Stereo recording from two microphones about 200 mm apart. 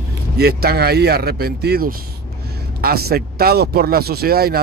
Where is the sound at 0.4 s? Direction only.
50° right (ahead or behind).